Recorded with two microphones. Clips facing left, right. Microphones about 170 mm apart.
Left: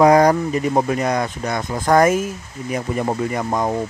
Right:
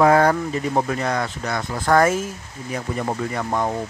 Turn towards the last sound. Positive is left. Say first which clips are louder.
# left 3 dB
turn(degrees=15)  # may be behind; listen again after turning